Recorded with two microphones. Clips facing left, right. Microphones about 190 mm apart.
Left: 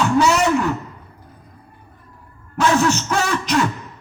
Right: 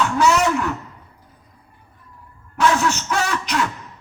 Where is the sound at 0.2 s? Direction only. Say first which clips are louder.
Even; 30° left (ahead or behind).